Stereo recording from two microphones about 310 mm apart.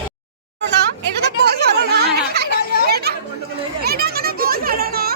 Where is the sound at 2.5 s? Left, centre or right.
Left.